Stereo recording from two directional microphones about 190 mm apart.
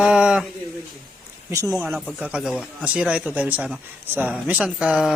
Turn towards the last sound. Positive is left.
turn(degrees=-5)  # may be behind; listen again after turning